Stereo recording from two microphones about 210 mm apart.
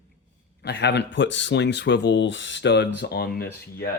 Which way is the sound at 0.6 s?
55° left (ahead or behind).